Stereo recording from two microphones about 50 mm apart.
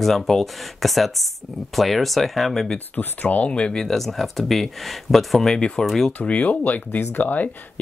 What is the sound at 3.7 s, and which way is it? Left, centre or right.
Speech, centre.